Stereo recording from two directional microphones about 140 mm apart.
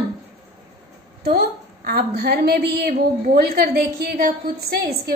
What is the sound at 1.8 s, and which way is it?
A woman's voice, 90° right.